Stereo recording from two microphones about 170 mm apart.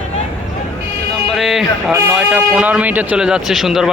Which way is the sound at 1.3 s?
Centre (ahead or behind).